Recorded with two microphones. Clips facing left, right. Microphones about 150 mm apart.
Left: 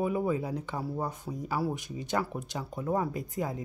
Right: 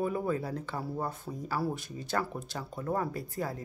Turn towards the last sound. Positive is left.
turn(degrees=15)  # may be behind; listen again after turning